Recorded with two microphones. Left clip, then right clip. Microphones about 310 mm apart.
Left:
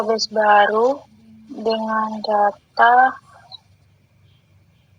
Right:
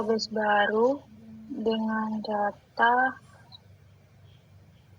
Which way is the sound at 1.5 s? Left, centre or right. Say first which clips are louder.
Left 8 dB; left.